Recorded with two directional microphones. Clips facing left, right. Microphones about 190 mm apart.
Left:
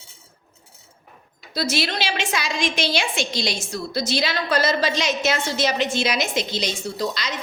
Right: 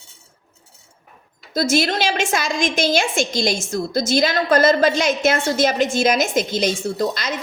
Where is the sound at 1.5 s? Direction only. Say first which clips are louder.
Right 6 dB; 50° right (ahead or behind).